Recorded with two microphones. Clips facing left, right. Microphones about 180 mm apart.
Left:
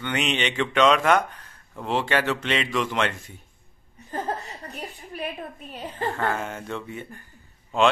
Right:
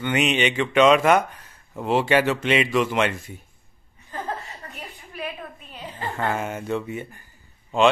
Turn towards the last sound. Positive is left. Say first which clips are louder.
# right 2 dB
turn(degrees=0)  # may be behind; listen again after turning